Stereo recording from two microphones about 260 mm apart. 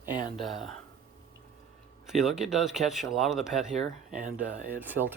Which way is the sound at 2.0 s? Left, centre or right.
Centre.